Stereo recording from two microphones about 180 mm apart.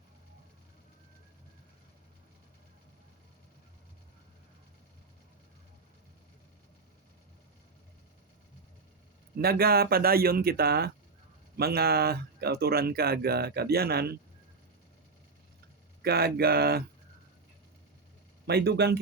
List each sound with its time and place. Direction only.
9.4 s speech: 55° right (ahead or behind)
16.0 s speech: 60° right (ahead or behind)
18.4 s speech: 65° right (ahead or behind)